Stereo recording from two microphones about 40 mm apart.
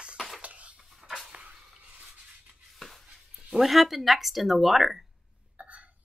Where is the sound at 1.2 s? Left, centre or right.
Right.